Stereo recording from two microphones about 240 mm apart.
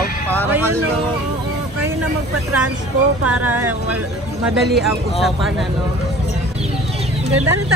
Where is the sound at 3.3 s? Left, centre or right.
Centre.